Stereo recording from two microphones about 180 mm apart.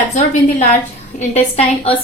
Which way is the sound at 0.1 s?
40° left (ahead or behind).